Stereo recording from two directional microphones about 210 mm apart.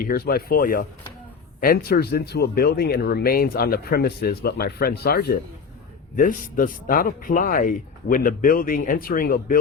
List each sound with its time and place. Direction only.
0.0 s speech: 45° left (ahead or behind)